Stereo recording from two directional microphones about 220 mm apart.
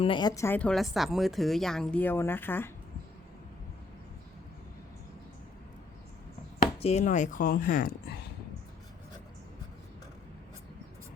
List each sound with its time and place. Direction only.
0.0 s a woman's voice: 20° left (ahead or behind)
6.7 s speech: 30° left (ahead or behind)